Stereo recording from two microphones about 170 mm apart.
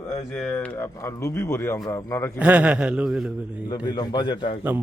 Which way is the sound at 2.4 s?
5° right (ahead or behind).